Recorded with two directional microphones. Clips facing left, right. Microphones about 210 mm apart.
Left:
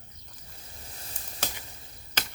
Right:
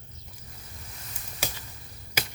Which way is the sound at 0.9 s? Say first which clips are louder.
Even; 30° left (ahead or behind).